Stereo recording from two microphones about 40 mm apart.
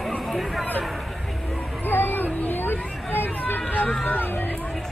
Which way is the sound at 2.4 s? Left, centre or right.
Left.